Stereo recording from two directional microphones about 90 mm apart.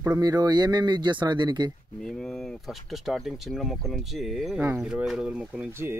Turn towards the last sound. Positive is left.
turn(degrees=-30)  # may be behind; listen again after turning